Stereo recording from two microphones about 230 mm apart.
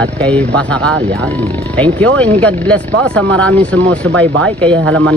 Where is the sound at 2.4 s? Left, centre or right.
Centre.